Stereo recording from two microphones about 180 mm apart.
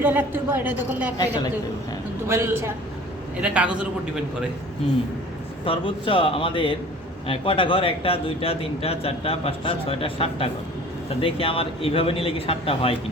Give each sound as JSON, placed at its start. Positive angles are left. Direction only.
{"t": 0.0, "sound": "a woman's voice", "side_deg": -10}
{"t": 2.2, "sound": "a woman's voice", "side_deg": -15}
{"t": 5.6, "sound": "a man's voice", "side_deg": 30}